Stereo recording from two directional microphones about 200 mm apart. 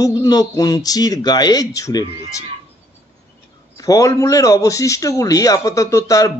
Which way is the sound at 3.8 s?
15° left (ahead or behind).